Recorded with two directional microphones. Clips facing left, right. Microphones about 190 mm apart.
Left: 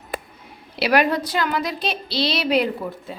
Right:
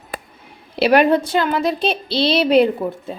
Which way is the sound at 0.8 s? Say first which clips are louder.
Right 5 dB; 25° right (ahead or behind).